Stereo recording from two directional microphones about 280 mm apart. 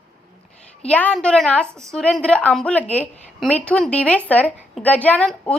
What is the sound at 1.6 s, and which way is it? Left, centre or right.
Speech, centre.